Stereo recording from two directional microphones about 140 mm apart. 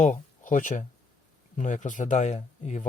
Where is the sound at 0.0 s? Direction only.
70° left (ahead or behind).